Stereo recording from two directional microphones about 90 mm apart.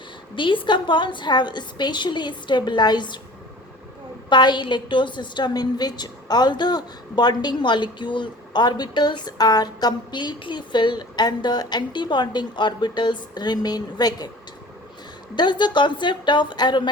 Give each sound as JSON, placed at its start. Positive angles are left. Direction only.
{"t": 0.3, "sound": "a woman's voice", "side_deg": 65}
{"t": 4.3, "sound": "a woman's voice", "side_deg": 55}
{"t": 15.4, "sound": "a woman's voice", "side_deg": 55}